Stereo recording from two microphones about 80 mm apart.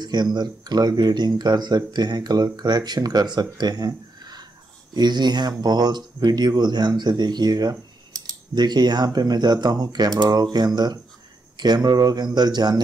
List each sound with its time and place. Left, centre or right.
0.0 s speech: right